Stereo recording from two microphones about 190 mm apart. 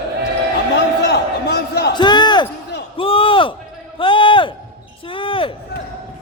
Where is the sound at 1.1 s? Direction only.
60° left (ahead or behind).